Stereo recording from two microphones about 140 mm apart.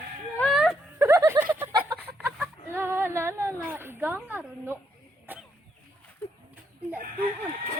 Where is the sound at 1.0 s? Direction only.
20° right (ahead or behind).